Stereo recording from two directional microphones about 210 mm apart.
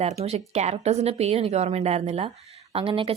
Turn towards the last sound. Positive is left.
turn(degrees=-25)  # may be behind; listen again after turning